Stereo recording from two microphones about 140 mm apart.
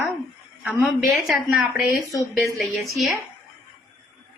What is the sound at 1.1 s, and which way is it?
Speech, 5° right (ahead or behind).